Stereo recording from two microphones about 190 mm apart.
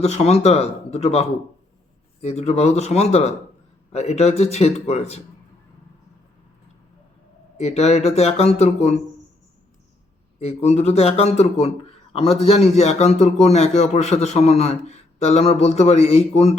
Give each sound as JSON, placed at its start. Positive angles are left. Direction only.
{"t": 0.0, "sound": "a man's voice", "side_deg": 35}
{"t": 7.6, "sound": "a man's voice", "side_deg": 35}
{"t": 10.4, "sound": "a man's voice", "side_deg": 35}